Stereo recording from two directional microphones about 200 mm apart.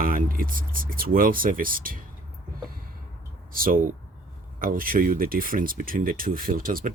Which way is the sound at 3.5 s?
45° right (ahead or behind).